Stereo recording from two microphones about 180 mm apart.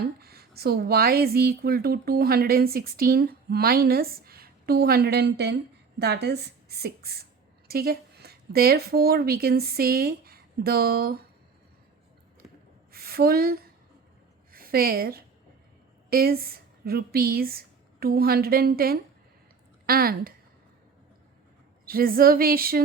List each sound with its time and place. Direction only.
0.2 s a woman's voice: 60° right (ahead or behind)
12.9 s a sound: 55° right (ahead or behind)
14.5 s a woman's voice: 55° right (ahead or behind)
21.8 s a woman's voice: 55° right (ahead or behind)